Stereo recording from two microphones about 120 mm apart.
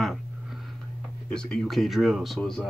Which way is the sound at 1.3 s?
5° left (ahead or behind).